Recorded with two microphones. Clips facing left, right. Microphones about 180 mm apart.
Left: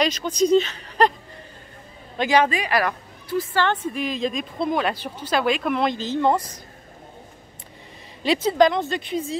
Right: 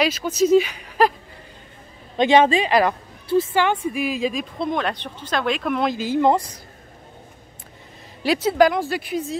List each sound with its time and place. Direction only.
0.0 s speech: 5° right (ahead or behind)
2.1 s a woman's voice: 25° right (ahead or behind)
3.5 s speech: 15° right (ahead or behind)
8.3 s speech: 5° right (ahead or behind)